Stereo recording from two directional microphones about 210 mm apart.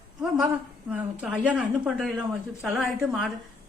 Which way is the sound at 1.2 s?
5° right (ahead or behind).